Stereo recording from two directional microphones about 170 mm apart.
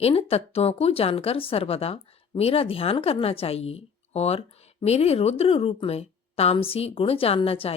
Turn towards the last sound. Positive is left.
turn(degrees=35)  # may be behind; listen again after turning